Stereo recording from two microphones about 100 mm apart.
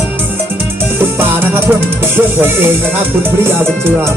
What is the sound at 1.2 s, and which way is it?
Music, 20° right (ahead or behind).